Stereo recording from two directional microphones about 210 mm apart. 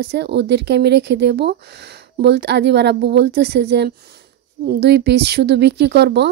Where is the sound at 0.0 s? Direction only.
55° right (ahead or behind).